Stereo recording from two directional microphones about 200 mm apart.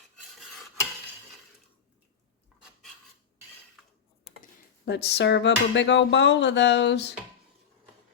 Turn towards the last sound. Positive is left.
turn(degrees=60)  # may be behind; listen again after turning